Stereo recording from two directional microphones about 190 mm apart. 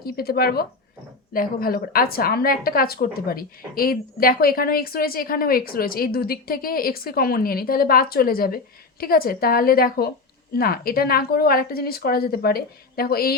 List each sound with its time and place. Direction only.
0.0 s a woman's voice: 55° left (ahead or behind)